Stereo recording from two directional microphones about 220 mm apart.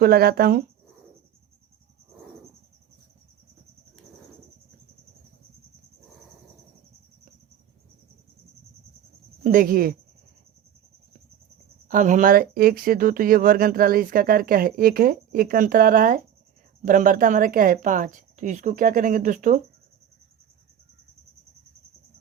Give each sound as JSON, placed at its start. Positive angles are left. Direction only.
{"t": 0.0, "sound": "speech", "side_deg": -45}
{"t": 9.4, "sound": "speech", "side_deg": -40}
{"t": 11.9, "sound": "speech", "side_deg": -35}